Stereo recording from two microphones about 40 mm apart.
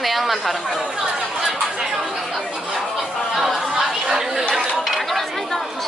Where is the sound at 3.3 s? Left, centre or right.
Centre.